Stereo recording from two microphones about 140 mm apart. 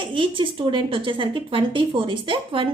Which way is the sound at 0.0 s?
35° right (ahead or behind).